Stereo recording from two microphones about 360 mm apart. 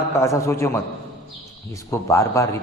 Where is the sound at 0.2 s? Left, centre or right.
Centre.